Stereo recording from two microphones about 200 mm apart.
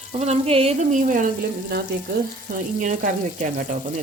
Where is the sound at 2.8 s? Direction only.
40° right (ahead or behind).